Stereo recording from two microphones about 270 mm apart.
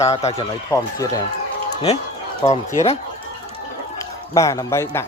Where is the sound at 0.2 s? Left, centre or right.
Left.